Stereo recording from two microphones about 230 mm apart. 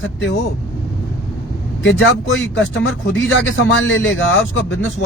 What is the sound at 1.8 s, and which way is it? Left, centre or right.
Speech, left.